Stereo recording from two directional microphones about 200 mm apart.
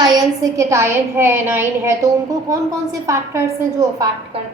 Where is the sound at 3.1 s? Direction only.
15° right (ahead or behind).